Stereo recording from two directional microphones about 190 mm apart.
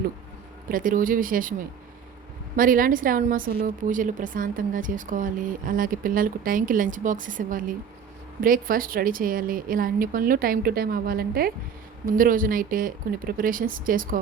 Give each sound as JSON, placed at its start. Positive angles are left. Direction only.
{"t": 0.7, "sound": "speech", "side_deg": -45}